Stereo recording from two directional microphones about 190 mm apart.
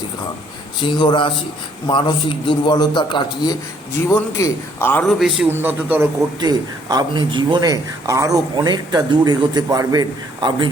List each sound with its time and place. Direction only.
0.8 s a man's voice: 25° left (ahead or behind)
5.2 s a man's voice: 5° right (ahead or behind)
6.4 s speech: 20° right (ahead or behind)